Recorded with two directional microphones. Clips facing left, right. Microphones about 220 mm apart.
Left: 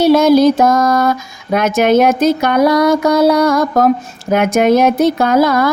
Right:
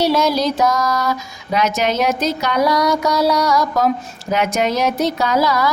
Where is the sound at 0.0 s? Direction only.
50° left (ahead or behind).